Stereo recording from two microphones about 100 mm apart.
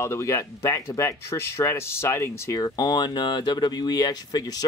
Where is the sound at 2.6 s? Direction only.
45° left (ahead or behind).